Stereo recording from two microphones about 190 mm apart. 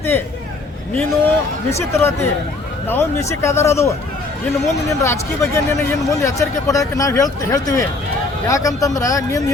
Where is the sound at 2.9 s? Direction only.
15° left (ahead or behind).